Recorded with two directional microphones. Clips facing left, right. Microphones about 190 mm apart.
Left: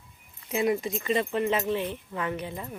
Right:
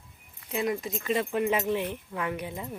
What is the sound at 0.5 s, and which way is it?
Speech, 5° left (ahead or behind).